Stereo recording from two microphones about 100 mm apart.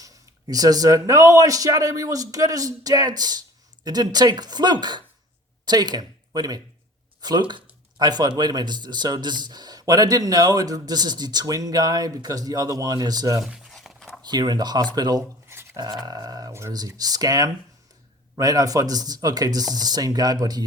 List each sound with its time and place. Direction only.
0.0 s speech: 35° right (ahead or behind)
13.4 s a sound: centre (ahead or behind)
14.3 s speech: 45° right (ahead or behind)